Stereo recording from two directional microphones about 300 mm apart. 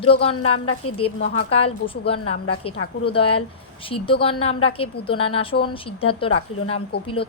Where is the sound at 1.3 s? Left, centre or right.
Centre.